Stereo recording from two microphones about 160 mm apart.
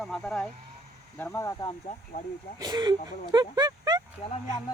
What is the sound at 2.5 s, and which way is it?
Speech, 25° right (ahead or behind).